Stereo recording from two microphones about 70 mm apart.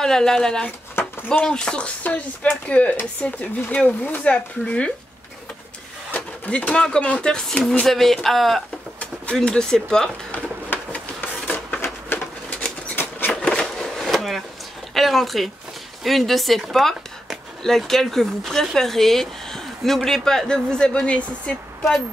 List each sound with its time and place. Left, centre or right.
0.0 s a woman's voice: centre
0.7 s a sound: left
1.4 s a woman's voice: centre
6.1 s speech: left; by 8.6 s centre
9.0 s speech: centre
10.3 s printer: left
11.8 s a sound: left
13.3 s a sound: centre
15.0 s a woman's voice: centre